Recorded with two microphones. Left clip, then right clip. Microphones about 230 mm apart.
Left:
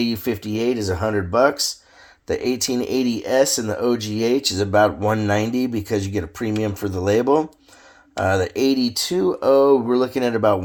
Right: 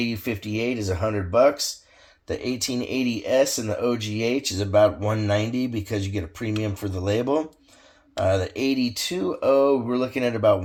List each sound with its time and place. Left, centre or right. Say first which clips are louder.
0.0 s speech: left 4 dB; left